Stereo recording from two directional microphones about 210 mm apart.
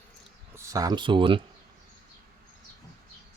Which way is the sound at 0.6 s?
15° right (ahead or behind).